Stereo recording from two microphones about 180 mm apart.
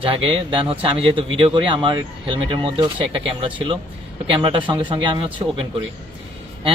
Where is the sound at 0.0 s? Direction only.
30° right (ahead or behind).